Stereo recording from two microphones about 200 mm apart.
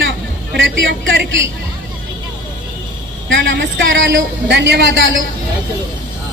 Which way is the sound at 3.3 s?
65° right (ahead or behind).